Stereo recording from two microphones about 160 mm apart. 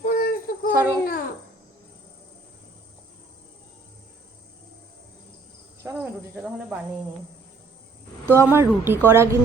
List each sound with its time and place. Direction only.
0.0 s a sound: 65° left (ahead or behind)
5.8 s speech: 10° right (ahead or behind)
8.3 s speech: 15° right (ahead or behind)